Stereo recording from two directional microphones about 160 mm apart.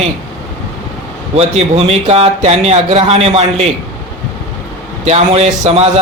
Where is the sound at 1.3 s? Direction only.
40° right (ahead or behind).